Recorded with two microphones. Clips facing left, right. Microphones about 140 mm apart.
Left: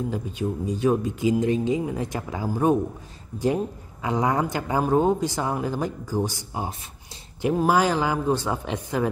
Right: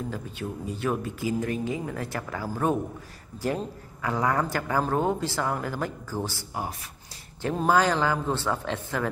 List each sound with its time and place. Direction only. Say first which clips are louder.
0.1 s speech: left 6 dB; 15° left (ahead or behind)